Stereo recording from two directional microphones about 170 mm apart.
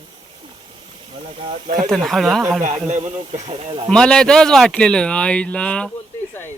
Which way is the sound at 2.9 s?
40° right (ahead or behind).